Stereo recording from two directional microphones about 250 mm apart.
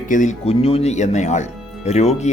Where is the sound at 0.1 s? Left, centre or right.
Left.